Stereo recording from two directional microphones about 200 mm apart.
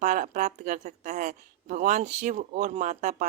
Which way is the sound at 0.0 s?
40° right (ahead or behind).